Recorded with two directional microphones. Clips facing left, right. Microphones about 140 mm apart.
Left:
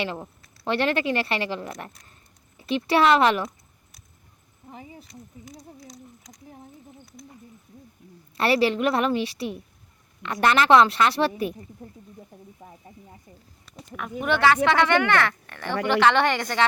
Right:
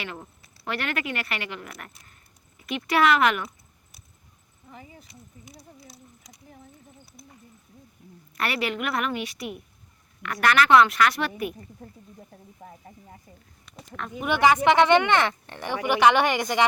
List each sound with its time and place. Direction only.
0.0 s a woman's voice: 30° left (ahead or behind)
4.7 s speech: 35° left (ahead or behind)
5.9 s speech: 5° right (ahead or behind)
8.4 s a woman's voice: 30° left (ahead or behind)
14.3 s speech: 15° right (ahead or behind)